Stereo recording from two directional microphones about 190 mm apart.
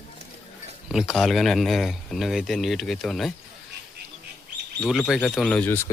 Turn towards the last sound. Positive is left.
turn(degrees=15)  # may be behind; listen again after turning